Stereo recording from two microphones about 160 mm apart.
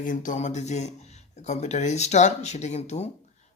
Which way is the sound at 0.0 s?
55° left (ahead or behind).